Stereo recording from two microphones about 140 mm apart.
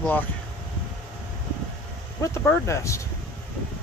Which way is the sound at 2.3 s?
20° left (ahead or behind).